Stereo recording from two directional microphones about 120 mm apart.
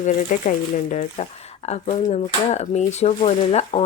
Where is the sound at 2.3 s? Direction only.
55° left (ahead or behind).